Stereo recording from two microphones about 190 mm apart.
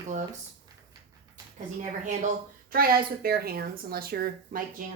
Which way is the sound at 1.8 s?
40° right (ahead or behind).